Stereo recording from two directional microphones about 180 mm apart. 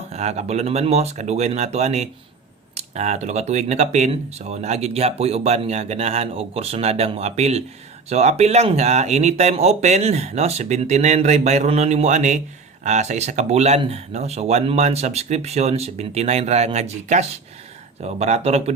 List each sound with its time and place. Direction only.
0.1 s speech: 40° right (ahead or behind)